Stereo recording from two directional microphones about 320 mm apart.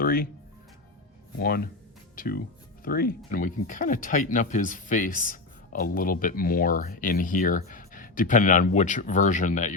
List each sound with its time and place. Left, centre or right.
0.0 s speech: left
1.4 s speech: left